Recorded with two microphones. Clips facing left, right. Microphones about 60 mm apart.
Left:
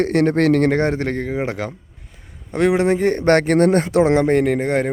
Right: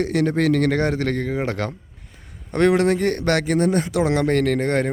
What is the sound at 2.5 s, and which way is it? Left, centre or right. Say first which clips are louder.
Speech: even; centre.